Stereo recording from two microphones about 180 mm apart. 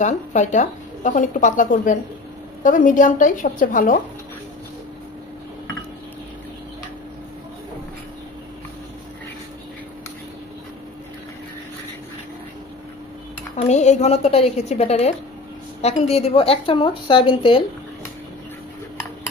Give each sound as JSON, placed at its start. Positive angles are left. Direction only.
{"t": 0.0, "sound": "speech", "side_deg": 40}
{"t": 13.6, "sound": "a woman's voice", "side_deg": 40}